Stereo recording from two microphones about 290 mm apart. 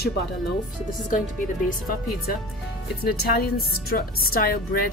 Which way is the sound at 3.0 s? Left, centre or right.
Left.